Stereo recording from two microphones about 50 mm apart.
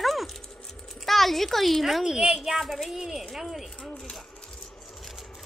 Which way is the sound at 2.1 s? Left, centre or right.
Right.